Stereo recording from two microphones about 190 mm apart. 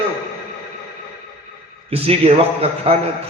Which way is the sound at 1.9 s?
30° right (ahead or behind).